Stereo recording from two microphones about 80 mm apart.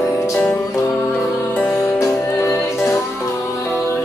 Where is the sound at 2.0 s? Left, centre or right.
Left.